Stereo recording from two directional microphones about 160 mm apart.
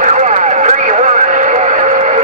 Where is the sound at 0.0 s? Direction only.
45° right (ahead or behind).